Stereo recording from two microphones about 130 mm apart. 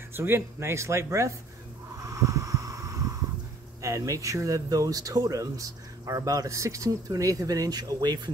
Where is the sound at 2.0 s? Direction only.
25° right (ahead or behind).